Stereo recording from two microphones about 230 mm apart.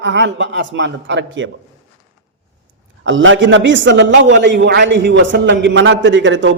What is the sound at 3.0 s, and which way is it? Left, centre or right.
A man's voice, right.